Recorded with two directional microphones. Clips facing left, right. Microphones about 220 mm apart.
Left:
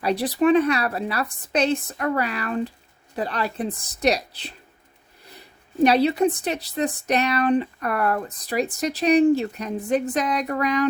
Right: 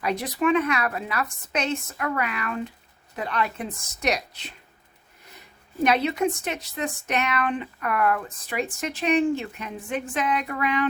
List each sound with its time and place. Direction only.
0.0 s speech: 35° left (ahead or behind)
5.8 s speech: 35° left (ahead or behind)